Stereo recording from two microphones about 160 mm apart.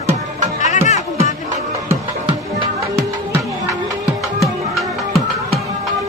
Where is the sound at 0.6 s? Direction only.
50° left (ahead or behind).